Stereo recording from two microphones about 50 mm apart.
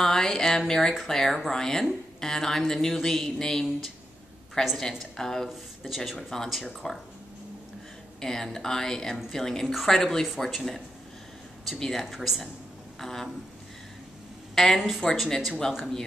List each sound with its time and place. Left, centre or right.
0.0 s speech: centre
4.7 s speech: centre
5.5 s speech: centre
6.3 s speech: centre
8.2 s speech: centre
11.8 s speech: centre
13.0 s speech: centre
14.5 s a sound: centre
14.8 s speech: centre